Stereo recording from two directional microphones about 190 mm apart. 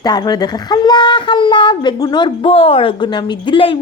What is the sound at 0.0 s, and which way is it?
A woman's voice, 20° left (ahead or behind).